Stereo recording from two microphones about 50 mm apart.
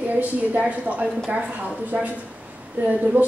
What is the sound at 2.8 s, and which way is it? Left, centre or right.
Speech, right.